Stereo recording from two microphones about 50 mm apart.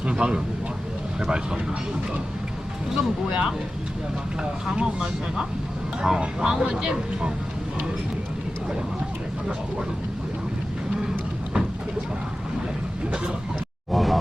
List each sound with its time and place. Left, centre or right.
0.0 s speech: centre
2.9 s speech: centre
4.8 s speech: centre
13.9 s music: centre